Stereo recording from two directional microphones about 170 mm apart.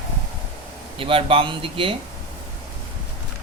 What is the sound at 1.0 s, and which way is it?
Speech, 30° right (ahead or behind).